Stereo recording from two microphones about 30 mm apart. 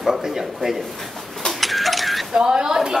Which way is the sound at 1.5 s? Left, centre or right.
Centre.